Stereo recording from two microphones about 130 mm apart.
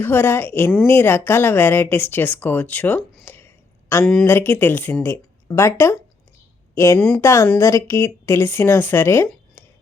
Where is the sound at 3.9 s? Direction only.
20° left (ahead or behind).